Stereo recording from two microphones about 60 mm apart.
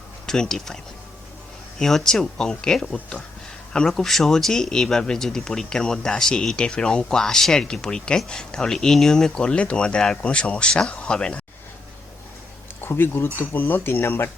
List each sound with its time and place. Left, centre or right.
0.3 s speech: centre
1.8 s speech: centre
12.8 s speech: left